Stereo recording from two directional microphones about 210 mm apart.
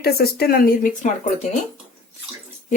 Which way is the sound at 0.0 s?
50° left (ahead or behind).